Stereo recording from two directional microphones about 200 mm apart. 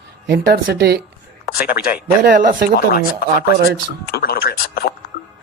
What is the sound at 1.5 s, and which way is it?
Speech, 45° left (ahead or behind).